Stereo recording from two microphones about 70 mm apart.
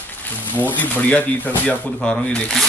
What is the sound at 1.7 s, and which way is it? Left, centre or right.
Speech, centre.